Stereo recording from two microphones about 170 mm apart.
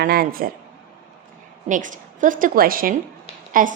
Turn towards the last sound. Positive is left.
turn(degrees=-55)  # may be behind; listen again after turning